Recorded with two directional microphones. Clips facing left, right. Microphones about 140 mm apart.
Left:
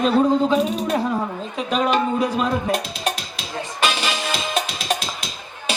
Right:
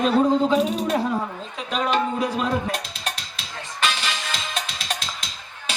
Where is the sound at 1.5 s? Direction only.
15° left (ahead or behind).